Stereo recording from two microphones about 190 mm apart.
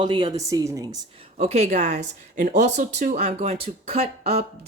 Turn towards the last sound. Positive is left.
turn(degrees=-30)  # may be behind; listen again after turning